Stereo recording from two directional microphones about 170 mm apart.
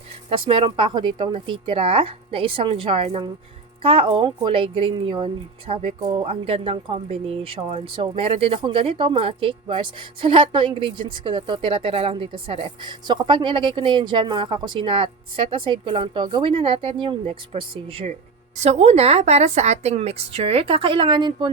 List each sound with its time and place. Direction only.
0.3 s speech: 30° right (ahead or behind)